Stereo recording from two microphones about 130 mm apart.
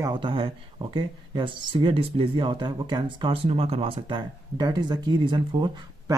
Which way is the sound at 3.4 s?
50° right (ahead or behind).